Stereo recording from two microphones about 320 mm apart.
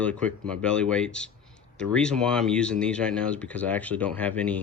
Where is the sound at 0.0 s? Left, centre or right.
Centre.